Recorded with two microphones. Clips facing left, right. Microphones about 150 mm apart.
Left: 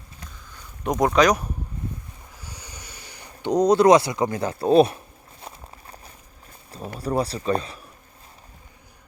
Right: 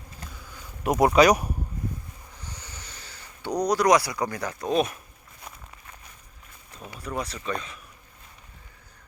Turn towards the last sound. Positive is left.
turn(degrees=35)  # may be behind; listen again after turning